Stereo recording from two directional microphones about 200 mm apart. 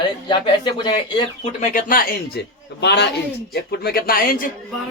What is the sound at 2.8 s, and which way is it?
Speech, 60° left (ahead or behind).